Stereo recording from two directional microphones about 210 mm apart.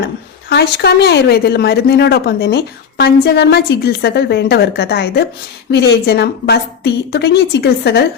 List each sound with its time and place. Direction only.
0.5 s speech: 50° left (ahead or behind)